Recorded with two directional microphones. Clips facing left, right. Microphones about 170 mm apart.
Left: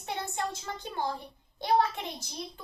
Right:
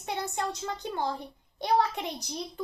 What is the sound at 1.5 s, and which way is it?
Speech, 20° right (ahead or behind).